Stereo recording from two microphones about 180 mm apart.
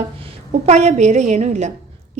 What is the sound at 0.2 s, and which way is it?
A woman's voice, 35° right (ahead or behind).